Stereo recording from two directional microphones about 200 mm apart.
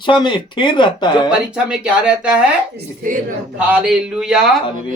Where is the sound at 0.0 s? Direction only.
25° left (ahead or behind).